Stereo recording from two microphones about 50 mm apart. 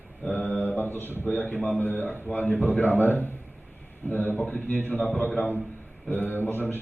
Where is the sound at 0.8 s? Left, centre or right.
Left.